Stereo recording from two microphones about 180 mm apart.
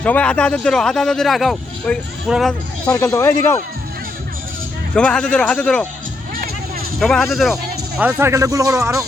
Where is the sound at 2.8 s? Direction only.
20° left (ahead or behind).